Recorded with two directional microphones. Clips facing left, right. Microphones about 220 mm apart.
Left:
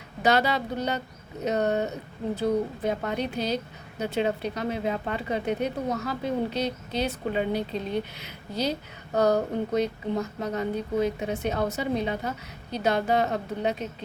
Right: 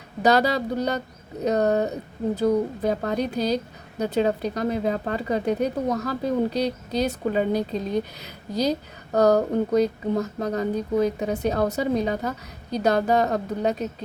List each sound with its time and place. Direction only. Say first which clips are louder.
0.2 s speech: right 4 dB; 40° right (ahead or behind)